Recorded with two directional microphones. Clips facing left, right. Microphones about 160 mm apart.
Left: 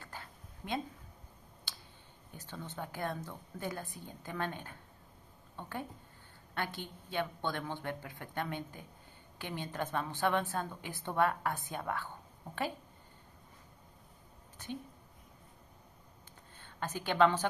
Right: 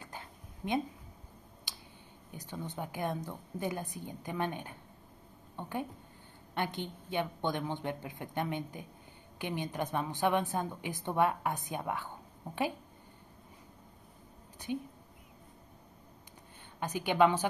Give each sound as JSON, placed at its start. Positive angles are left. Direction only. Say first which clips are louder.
{"t": 0.0, "sound": "a sound", "louder": "right 2 dB", "side_deg": -20}
{"t": 2.3, "sound": "a woman's voice", "louder": "right 3 dB", "side_deg": -15}
{"t": 14.6, "sound": "speech", "louder": "right 6 dB", "side_deg": -15}
{"t": 16.8, "sound": "a woman's voice", "louder": "right 2 dB", "side_deg": -15}